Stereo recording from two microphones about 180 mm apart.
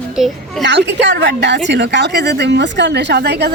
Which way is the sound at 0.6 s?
75° right (ahead or behind).